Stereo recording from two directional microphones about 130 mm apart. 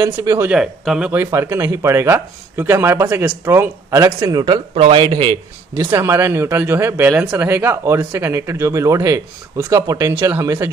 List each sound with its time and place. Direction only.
0.0 s speech: 30° right (ahead or behind)
0.5 s speech: 5° right (ahead or behind)
1.2 s speech: 20° right (ahead or behind)
4.7 s speech: 40° right (ahead or behind)
5.9 s speech: 20° right (ahead or behind)